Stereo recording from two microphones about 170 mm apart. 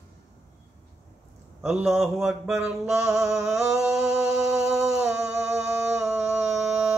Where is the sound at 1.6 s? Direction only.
5° right (ahead or behind).